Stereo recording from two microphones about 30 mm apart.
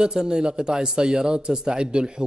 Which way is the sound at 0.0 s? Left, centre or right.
Right.